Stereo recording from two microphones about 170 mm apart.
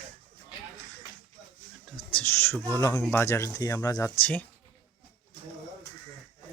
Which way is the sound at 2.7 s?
15° left (ahead or behind).